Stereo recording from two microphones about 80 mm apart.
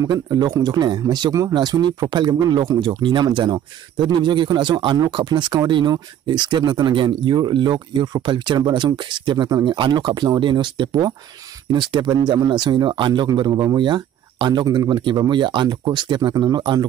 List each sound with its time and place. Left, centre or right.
0.0 s speech: right
2.8 s speech: right